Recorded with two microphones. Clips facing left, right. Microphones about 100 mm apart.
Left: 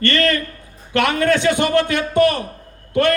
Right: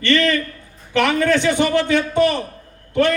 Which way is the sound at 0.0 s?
45° left (ahead or behind).